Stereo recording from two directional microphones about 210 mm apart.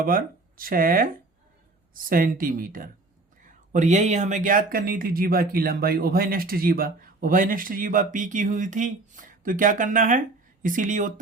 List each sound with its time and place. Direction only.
0.0 s speech: 40° right (ahead or behind)